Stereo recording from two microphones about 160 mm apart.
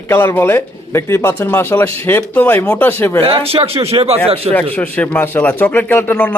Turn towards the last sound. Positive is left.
turn(degrees=15)  # may be behind; listen again after turning